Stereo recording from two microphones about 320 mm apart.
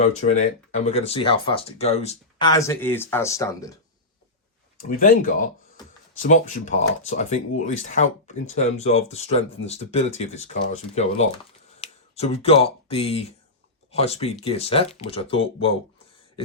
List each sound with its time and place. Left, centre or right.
0.0 s speech: left
4.8 s speech: left
11.8 s speech: centre